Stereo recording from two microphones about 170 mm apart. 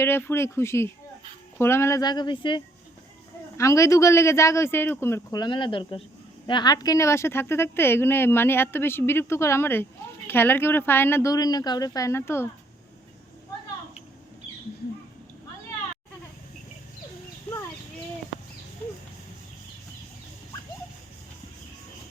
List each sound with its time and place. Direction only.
0.0 s speech: 15° left (ahead or behind)